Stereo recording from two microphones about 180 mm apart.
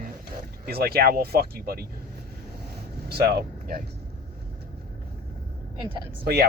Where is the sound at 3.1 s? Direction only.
60° right (ahead or behind).